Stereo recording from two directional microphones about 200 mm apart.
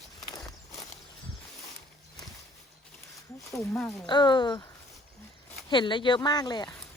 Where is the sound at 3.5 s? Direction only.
15° left (ahead or behind).